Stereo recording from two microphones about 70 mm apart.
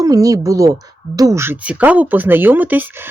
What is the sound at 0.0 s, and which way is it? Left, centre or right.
Speech, right.